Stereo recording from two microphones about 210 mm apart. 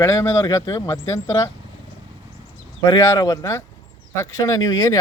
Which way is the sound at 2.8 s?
15° left (ahead or behind).